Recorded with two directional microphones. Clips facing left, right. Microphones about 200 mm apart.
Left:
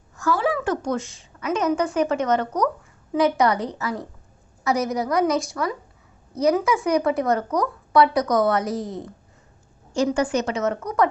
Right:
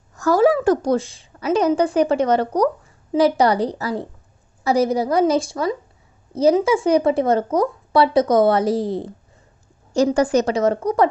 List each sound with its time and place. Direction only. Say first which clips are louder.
0.2 s a woman's voice: right 7 dB; 40° right (ahead or behind)